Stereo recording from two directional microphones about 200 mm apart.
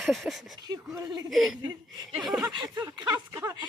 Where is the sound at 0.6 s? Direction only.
20° right (ahead or behind).